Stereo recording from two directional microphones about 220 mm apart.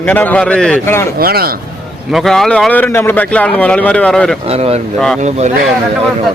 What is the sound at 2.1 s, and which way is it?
A man's voice, centre (ahead or behind).